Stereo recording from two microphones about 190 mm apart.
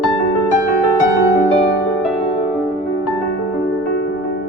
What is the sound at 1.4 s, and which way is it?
Music, 35° left (ahead or behind).